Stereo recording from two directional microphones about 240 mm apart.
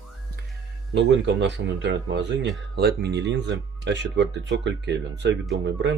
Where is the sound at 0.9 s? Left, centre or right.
Right.